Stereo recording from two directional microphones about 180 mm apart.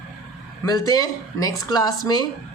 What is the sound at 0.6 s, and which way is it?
Speech, 20° left (ahead or behind).